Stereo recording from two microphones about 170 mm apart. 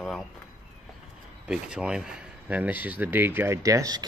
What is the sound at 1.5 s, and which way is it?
Speech, 5° right (ahead or behind).